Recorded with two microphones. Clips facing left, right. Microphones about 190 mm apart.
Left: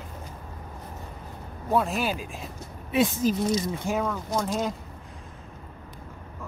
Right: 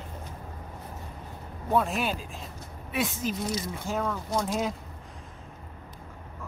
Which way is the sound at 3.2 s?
40° left (ahead or behind).